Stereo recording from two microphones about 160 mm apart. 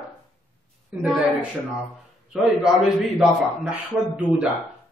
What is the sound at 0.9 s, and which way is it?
Speech, 10° right (ahead or behind).